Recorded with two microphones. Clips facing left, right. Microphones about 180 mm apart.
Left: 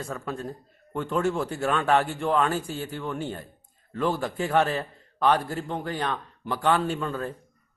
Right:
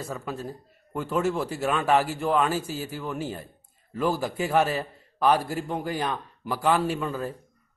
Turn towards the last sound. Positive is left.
turn(degrees=-5)  # may be behind; listen again after turning